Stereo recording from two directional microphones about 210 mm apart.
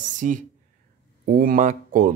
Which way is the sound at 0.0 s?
35° right (ahead or behind).